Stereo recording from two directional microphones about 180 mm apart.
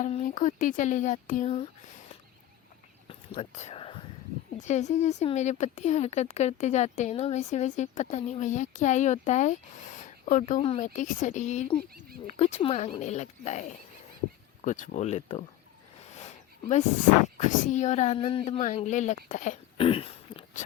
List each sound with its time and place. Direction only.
0.0 s speech: 40° left (ahead or behind)
3.1 s whispering: 40° left (ahead or behind)
4.6 s speech: 40° left (ahead or behind)
17.3 s speech: 40° left (ahead or behind)
19.7 s a sound: 30° left (ahead or behind)